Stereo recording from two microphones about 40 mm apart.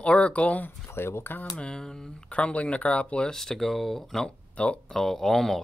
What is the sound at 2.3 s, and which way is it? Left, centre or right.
Speech, left.